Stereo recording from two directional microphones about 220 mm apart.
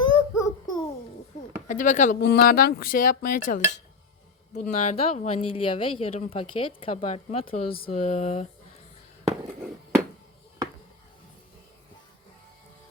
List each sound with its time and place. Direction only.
0.0 s child singing: 15° left (ahead or behind)
1.6 s speech: 35° left (ahead or behind)